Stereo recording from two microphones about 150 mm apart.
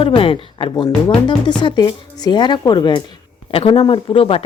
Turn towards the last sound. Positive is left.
turn(degrees=35)  # may be behind; listen again after turning